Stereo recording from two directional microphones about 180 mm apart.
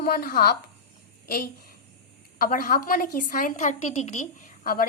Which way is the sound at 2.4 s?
50° left (ahead or behind).